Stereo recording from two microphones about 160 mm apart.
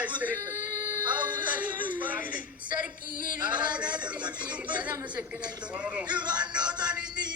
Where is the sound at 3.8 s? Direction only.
25° right (ahead or behind).